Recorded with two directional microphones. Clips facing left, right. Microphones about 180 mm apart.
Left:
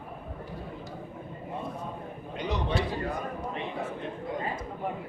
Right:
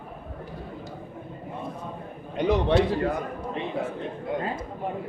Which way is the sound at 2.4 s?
60° right (ahead or behind).